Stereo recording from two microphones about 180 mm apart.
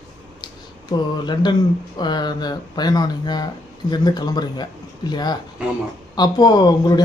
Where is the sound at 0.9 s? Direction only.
25° left (ahead or behind).